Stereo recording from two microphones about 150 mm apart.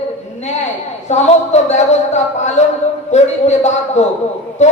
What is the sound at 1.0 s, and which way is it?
A man's voice, 50° left (ahead or behind).